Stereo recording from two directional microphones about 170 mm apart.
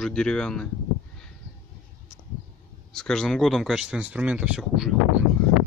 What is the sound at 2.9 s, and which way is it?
Speech, 5° left (ahead or behind).